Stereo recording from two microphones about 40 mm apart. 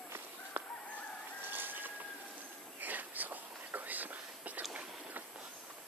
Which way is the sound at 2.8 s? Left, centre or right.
Right.